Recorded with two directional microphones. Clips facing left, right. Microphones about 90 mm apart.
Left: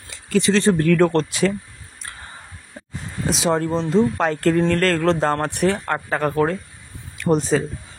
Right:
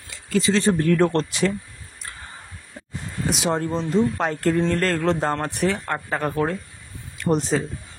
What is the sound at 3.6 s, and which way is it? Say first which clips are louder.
Speech: left 3 dB; 90° left.